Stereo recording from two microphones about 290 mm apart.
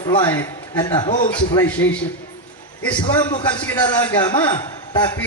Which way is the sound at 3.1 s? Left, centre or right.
Centre.